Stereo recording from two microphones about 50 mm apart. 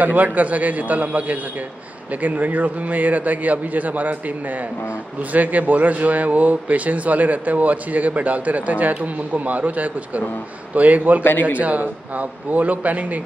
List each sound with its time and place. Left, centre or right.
0.0 s speech: right
5.3 s speech: right